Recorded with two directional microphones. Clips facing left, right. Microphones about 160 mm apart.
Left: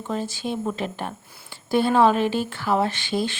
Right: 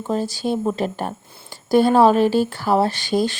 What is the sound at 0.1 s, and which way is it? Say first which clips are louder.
A woman's voice: right 6 dB; 35° right (ahead or behind).